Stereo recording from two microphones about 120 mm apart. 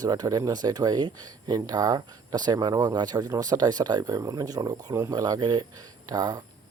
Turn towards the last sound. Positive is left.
turn(degrees=-35)  # may be behind; listen again after turning